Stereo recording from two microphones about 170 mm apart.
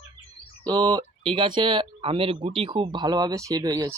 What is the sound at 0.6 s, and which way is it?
Speech, 25° right (ahead or behind).